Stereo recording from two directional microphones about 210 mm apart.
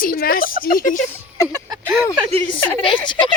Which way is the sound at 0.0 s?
45° left (ahead or behind).